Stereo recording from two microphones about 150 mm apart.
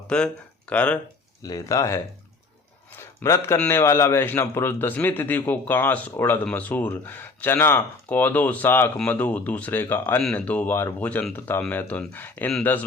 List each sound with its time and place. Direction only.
0.1 s a man's voice: 5° left (ahead or behind)
1.5 s speech: 25° left (ahead or behind)
3.2 s a man's voice: 15° left (ahead or behind)